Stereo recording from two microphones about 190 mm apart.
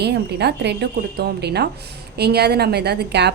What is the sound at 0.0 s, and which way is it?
A woman's voice, 60° right (ahead or behind).